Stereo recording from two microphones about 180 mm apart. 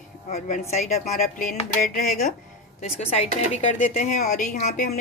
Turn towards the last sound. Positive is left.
turn(degrees=40)  # may be behind; listen again after turning